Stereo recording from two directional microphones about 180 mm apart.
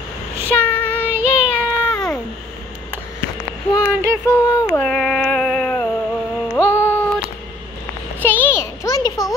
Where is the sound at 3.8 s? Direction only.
10° right (ahead or behind).